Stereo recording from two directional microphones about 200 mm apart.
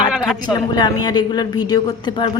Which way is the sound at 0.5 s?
20° left (ahead or behind).